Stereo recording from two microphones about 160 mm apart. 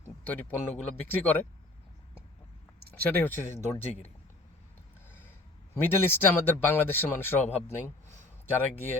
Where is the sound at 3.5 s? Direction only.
45° left (ahead or behind).